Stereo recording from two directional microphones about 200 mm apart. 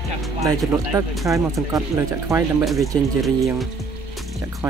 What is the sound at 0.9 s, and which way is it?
Speech, 15° right (ahead or behind).